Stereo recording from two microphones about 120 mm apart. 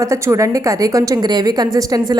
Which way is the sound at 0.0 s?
25° right (ahead or behind).